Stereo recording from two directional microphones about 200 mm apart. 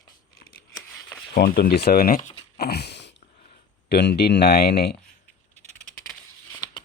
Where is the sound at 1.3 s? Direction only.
50° left (ahead or behind).